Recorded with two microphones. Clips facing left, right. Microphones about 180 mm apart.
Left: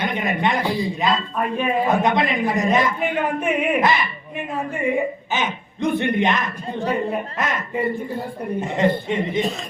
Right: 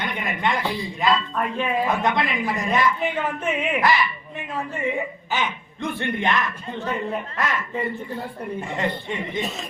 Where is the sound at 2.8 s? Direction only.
55° left (ahead or behind).